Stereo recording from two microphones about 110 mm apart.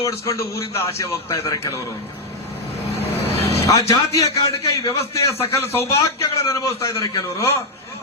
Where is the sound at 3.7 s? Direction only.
30° left (ahead or behind).